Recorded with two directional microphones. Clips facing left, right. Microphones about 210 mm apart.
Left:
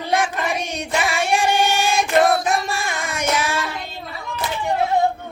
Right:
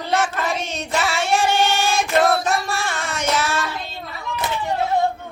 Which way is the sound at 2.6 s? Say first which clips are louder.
Even; 15° left (ahead or behind).